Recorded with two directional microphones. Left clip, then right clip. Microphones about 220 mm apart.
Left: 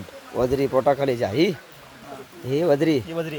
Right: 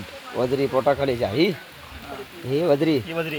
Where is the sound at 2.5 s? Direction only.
10° left (ahead or behind).